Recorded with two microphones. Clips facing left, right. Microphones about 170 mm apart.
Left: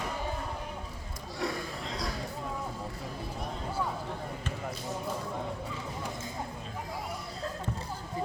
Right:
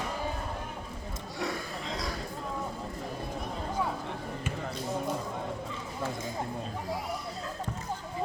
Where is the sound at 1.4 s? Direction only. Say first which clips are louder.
Even; centre (ahead or behind).